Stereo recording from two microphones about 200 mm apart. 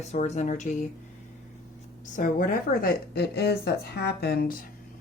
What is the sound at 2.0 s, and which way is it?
A woman's voice, 40° left (ahead or behind).